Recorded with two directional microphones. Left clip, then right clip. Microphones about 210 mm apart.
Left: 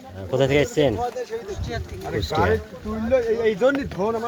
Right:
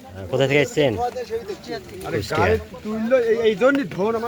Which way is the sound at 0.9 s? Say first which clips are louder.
Right 2 dB; 30° right (ahead or behind).